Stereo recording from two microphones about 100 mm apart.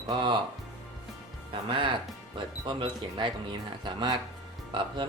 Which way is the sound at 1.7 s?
55° right (ahead or behind).